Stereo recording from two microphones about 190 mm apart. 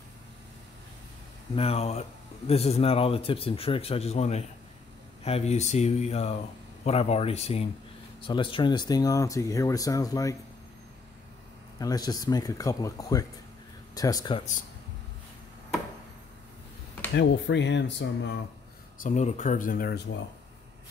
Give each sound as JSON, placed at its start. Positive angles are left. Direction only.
{"t": 1.5, "sound": "speech", "side_deg": 30}
{"t": 11.8, "sound": "speech", "side_deg": 20}
{"t": 17.1, "sound": "speech", "side_deg": 70}
{"t": 18.9, "sound": "speech", "side_deg": 40}